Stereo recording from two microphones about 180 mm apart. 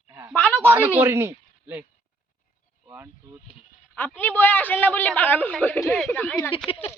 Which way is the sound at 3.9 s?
10° left (ahead or behind).